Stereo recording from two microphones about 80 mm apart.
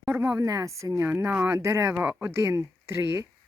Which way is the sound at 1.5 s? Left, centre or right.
Right.